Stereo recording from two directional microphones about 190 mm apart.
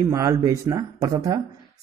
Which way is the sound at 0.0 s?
15° right (ahead or behind).